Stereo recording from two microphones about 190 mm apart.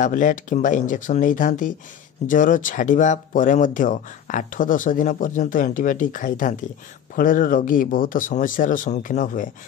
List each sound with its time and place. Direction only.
0.0 s speech: 45° left (ahead or behind)